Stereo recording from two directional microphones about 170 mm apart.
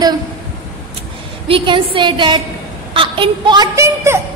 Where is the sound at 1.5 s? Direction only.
30° right (ahead or behind).